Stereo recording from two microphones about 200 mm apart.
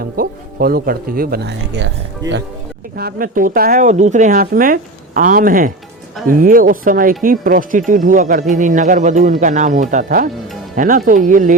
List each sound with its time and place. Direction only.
0.0 s speech: 50° right (ahead or behind)
2.9 s speech: 50° right (ahead or behind)